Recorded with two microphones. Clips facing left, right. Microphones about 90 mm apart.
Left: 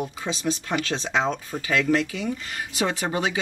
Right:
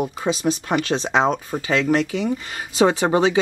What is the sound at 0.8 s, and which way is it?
Speech, 20° right (ahead or behind).